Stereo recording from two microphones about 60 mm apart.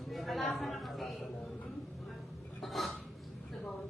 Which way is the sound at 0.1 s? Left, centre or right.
Centre.